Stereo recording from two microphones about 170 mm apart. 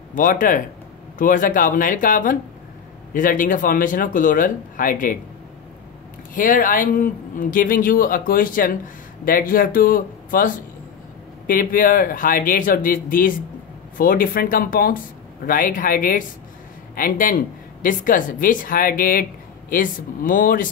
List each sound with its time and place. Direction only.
0.1 s speech: 50° left (ahead or behind)
6.3 s speech: 50° left (ahead or behind)